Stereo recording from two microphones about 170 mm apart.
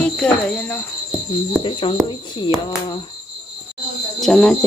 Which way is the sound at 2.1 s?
25° left (ahead or behind).